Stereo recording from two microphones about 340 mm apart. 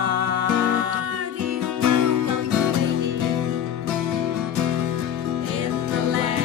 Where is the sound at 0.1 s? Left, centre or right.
Right.